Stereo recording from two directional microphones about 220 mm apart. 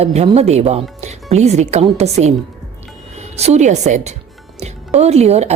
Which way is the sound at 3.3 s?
30° right (ahead or behind).